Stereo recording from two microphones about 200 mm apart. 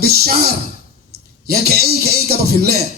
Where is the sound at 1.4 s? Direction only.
50° right (ahead or behind).